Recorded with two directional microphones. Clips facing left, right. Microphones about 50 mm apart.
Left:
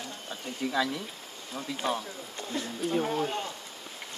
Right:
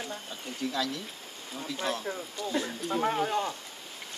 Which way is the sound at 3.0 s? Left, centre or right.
Right.